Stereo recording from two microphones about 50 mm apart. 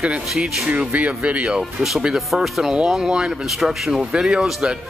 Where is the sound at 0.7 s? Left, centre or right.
Right.